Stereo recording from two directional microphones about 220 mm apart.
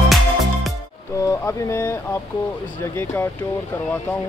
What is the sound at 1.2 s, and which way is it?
Speech, 15° left (ahead or behind).